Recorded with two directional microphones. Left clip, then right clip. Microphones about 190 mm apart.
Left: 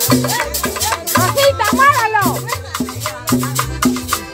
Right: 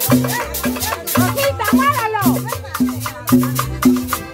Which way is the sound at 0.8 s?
35° left (ahead or behind).